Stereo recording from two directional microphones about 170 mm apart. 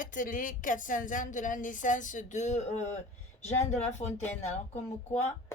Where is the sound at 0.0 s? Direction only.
50° left (ahead or behind).